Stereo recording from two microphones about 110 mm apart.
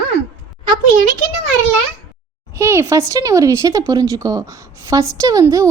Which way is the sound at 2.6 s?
25° right (ahead or behind).